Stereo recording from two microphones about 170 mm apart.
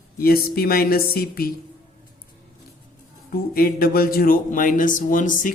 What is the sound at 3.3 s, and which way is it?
Speech, 60° left (ahead or behind).